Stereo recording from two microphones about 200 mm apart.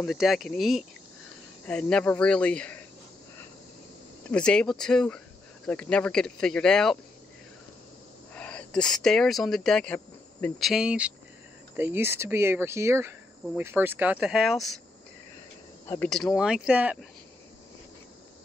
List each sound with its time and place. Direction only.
0.0 s speech: centre (ahead or behind)
4.3 s speech: 5° left (ahead or behind)
8.4 s speech: 5° left (ahead or behind)
10.7 s speech: 5° right (ahead or behind)
15.9 s speech: 5° left (ahead or behind)